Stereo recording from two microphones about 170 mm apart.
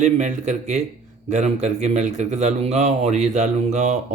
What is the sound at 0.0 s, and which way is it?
A man's voice, 45° right (ahead or behind).